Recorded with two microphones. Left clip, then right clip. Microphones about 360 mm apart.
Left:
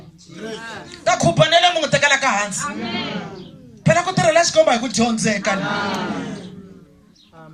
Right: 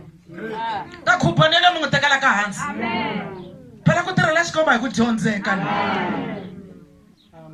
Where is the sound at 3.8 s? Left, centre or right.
Centre.